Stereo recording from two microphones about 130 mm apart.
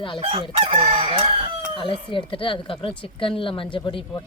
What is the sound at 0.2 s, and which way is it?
Crowing, 40° right (ahead or behind).